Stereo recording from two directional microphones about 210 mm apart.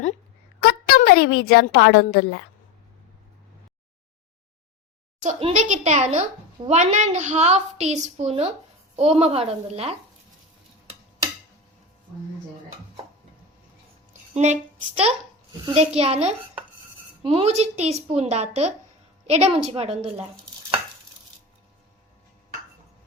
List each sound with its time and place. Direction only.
0.6 s a woman's voice: 50° left (ahead or behind)
5.2 s a woman's voice: 30° right (ahead or behind)
14.1 s a sound: 35° right (ahead or behind)
15.6 s a child's voice: 30° right (ahead or behind)